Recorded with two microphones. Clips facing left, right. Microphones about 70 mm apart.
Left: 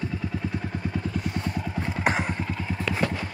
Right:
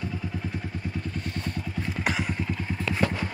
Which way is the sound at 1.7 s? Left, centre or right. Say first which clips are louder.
Left 3 dB; left.